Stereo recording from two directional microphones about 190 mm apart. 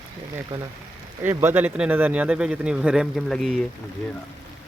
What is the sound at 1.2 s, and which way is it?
Speech, 10° right (ahead or behind).